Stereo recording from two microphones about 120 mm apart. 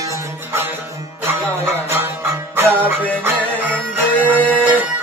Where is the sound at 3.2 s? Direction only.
15° right (ahead or behind).